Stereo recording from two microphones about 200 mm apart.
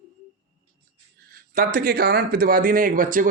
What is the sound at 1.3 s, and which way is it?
Speech, 45° right (ahead or behind).